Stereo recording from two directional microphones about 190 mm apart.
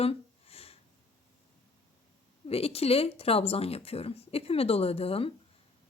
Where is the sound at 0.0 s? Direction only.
30° left (ahead or behind).